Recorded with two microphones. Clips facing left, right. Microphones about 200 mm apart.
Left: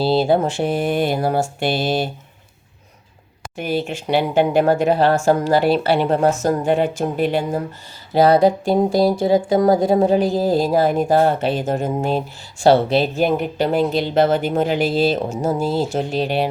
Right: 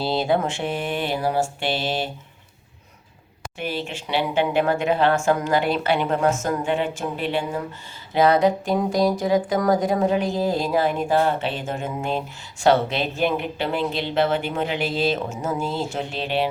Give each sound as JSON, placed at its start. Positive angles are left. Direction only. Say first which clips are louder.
{"t": 0.0, "sound": "speech", "louder": "left 5 dB", "side_deg": 30}
{"t": 3.6, "sound": "speech", "louder": "left 6 dB", "side_deg": 45}